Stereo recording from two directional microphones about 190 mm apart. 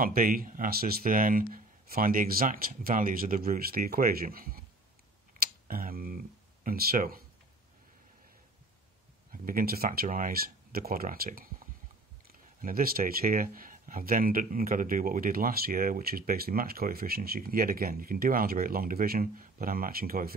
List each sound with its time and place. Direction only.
0.0 s speech: 50° right (ahead or behind)
5.4 s tick-tock: 50° right (ahead or behind)
5.7 s speech: 50° right (ahead or behind)
9.3 s speech: 50° right (ahead or behind)